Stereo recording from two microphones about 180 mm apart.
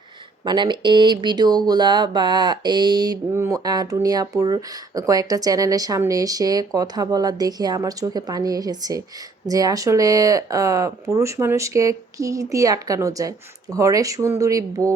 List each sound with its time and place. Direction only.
0.4 s speech: 25° right (ahead or behind)